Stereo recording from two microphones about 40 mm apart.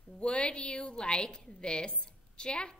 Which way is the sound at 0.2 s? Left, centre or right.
Left.